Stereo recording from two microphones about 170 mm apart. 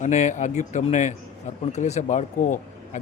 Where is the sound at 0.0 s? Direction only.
45° left (ahead or behind).